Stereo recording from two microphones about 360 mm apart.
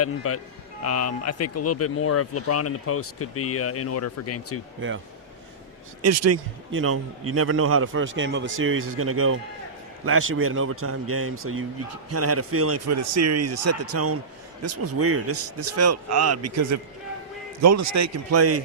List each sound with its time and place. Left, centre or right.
0.0 s speech: left
6.0 s a man's voice: right